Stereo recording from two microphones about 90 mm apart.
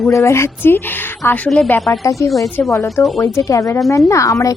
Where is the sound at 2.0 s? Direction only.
35° left (ahead or behind).